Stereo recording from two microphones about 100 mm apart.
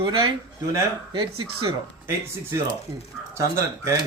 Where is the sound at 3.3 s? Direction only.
30° right (ahead or behind).